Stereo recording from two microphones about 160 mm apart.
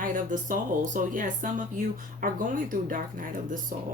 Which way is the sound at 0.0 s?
55° right (ahead or behind).